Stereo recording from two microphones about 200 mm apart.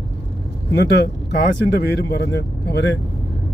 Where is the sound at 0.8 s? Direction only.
55° left (ahead or behind).